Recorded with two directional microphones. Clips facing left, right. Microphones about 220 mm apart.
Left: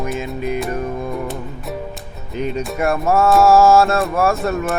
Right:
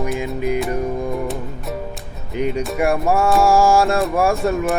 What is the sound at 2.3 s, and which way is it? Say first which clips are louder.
Speech: right 1 dB; 15° right (ahead or behind).